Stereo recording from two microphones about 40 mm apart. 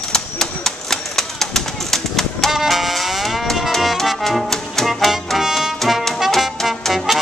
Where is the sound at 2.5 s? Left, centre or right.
Centre.